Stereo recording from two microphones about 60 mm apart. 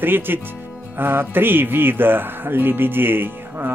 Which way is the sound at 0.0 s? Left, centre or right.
Right.